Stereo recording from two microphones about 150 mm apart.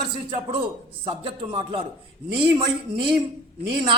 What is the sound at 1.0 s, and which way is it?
Speech, 35° right (ahead or behind).